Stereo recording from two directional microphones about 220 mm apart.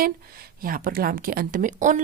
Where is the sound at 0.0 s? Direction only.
40° right (ahead or behind).